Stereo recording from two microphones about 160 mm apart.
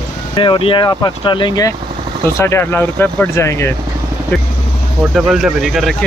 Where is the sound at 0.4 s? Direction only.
30° left (ahead or behind); by 3.7 s 15° left (ahead or behind).